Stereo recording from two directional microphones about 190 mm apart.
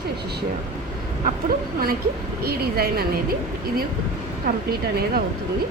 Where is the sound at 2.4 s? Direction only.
55° right (ahead or behind).